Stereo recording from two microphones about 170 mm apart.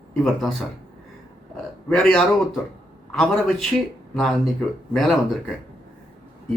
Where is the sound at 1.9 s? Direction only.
5° left (ahead or behind).